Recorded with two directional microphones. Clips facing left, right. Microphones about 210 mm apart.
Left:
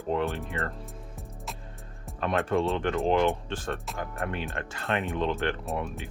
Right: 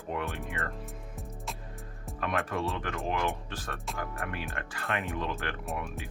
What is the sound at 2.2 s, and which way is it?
Speech, 25° left (ahead or behind).